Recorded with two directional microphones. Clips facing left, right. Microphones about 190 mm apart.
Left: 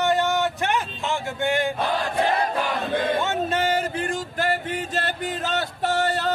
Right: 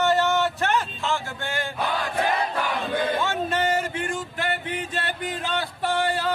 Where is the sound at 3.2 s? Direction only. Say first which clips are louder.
Left 1 dB; 25° left (ahead or behind).